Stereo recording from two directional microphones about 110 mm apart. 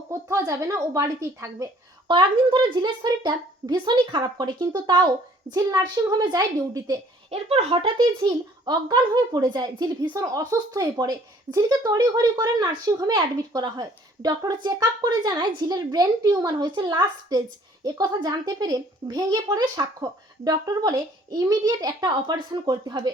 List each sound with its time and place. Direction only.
0.1 s speech: 30° right (ahead or behind)
2.0 s speech: 50° right (ahead or behind)
7.3 s speech: 70° right (ahead or behind); by 10.2 s 45° right (ahead or behind)
10.2 s speech: 35° right (ahead or behind)